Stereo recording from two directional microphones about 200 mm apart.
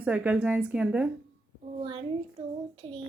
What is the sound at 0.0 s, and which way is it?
A woman's voice, 5° right (ahead or behind).